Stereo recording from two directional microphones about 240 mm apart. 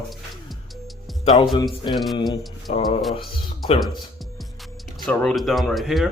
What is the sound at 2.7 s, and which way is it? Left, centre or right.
Speech, left.